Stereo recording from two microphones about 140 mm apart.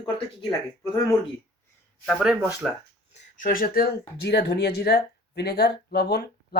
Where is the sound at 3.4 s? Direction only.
85° left.